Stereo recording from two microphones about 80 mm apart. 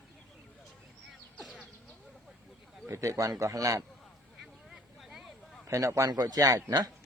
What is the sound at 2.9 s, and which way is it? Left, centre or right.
Speech, right.